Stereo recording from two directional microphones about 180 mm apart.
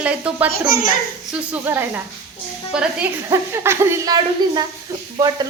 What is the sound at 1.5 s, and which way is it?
A woman's voice, 15° right (ahead or behind).